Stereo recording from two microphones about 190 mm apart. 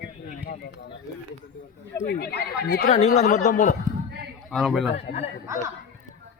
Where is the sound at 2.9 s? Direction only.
35° left (ahead or behind).